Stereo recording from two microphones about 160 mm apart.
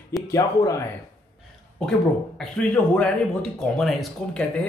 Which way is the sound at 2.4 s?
5° left (ahead or behind).